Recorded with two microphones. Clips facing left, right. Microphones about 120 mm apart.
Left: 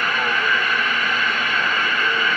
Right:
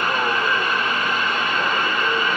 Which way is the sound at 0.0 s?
25° right (ahead or behind).